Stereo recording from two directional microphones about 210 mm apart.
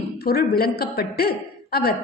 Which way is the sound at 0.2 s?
50° left (ahead or behind).